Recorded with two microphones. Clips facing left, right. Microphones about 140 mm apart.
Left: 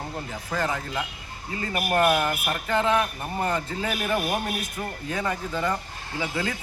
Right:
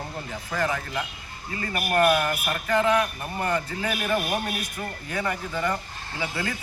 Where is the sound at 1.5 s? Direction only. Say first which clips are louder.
Even; 20° left (ahead or behind).